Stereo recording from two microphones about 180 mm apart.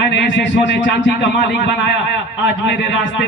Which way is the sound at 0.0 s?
75° left (ahead or behind).